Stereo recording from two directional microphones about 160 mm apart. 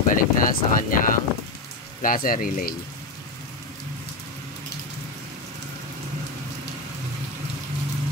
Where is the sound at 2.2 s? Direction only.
60° left (ahead or behind).